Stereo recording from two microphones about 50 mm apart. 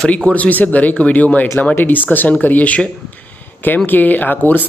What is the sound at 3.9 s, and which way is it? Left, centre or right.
Speech, left.